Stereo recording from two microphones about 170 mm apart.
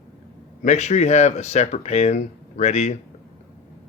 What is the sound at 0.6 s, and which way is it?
Speech, 40° left (ahead or behind).